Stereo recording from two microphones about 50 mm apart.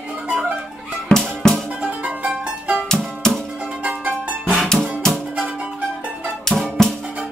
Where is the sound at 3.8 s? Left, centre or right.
Right.